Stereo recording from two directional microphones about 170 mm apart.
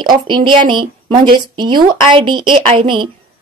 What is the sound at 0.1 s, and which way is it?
A woman's voice, 30° right (ahead or behind).